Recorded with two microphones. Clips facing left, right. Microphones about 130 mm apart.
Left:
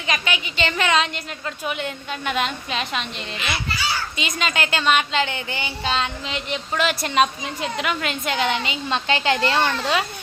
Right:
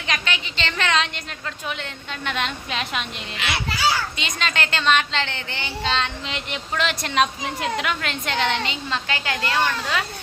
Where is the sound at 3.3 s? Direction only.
80° right.